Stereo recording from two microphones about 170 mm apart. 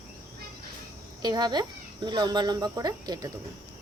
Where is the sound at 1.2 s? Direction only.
25° right (ahead or behind).